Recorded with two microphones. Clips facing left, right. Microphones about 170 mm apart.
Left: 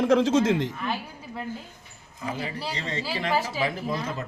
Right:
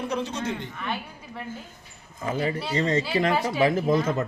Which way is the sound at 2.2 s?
45° right (ahead or behind).